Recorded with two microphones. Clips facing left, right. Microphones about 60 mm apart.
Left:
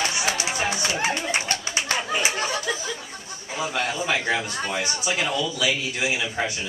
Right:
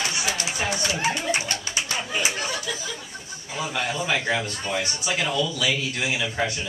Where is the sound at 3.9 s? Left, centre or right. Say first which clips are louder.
Right 2 dB; centre.